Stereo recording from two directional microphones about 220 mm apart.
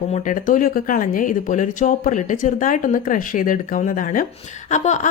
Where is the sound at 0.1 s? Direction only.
35° left (ahead or behind).